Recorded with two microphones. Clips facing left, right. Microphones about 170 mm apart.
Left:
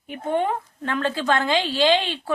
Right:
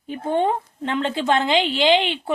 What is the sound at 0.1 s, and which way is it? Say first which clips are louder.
A woman's voice: right 2 dB; 30° right (ahead or behind).